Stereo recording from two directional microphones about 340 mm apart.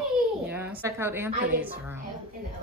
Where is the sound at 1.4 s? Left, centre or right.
Right.